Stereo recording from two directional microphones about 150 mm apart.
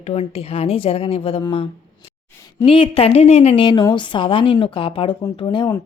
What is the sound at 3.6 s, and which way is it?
A woman's voice, 30° left (ahead or behind).